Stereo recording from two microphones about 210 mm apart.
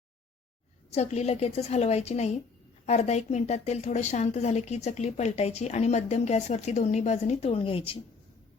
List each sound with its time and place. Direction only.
0.9 s a woman's voice: 30° left (ahead or behind)